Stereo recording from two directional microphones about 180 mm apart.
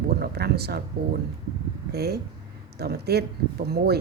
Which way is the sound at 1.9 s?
65° right (ahead or behind).